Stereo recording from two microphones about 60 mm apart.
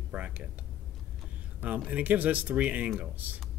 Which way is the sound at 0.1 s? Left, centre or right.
Right.